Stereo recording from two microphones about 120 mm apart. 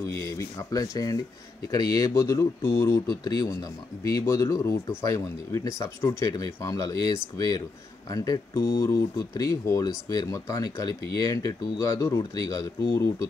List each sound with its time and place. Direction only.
0.1 s speech: 25° left (ahead or behind)